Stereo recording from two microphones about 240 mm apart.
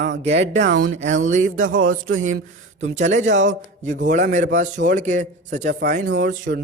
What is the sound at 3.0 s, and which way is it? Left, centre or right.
A man's voice, right.